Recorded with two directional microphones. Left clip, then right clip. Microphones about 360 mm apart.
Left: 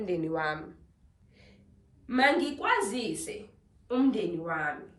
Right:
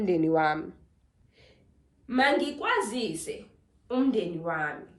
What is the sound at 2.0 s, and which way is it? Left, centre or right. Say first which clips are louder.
A woman's voice: right 1 dB; centre.